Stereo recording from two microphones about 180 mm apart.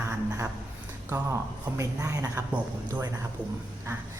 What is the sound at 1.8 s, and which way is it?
Speech, 15° right (ahead or behind).